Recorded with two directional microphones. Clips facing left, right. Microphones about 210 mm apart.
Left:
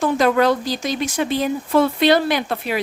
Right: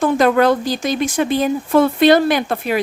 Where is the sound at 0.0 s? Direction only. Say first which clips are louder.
Right 3 dB; 55° right (ahead or behind).